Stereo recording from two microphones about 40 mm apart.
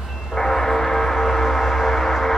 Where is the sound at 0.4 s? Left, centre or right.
Centre.